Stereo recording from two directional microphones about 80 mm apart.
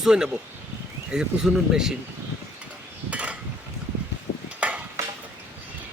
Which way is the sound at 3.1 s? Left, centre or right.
Centre.